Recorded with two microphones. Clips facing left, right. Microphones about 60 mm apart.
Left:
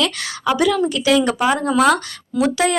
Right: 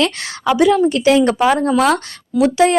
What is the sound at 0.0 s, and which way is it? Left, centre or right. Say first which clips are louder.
Speech: right 3 dB; right.